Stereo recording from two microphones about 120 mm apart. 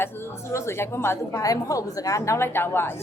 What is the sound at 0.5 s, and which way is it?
A woman's voice, 20° left (ahead or behind).